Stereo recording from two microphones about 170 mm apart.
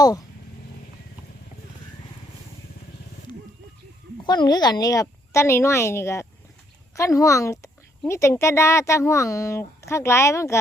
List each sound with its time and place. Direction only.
4.2 s a woman's voice: 25° left (ahead or behind)